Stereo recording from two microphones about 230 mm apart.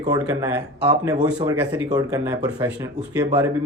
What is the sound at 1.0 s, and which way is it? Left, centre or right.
Speech, centre.